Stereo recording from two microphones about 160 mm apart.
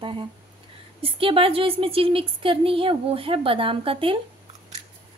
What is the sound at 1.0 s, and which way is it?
A woman's voice, 35° right (ahead or behind).